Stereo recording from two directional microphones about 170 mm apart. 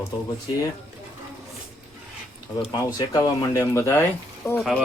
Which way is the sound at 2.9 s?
25° left (ahead or behind).